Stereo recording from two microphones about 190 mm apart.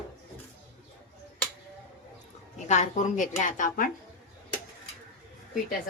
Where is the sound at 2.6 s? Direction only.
40° left (ahead or behind).